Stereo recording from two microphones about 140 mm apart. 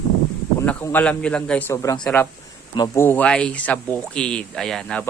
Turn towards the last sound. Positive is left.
turn(degrees=5)  # may be behind; listen again after turning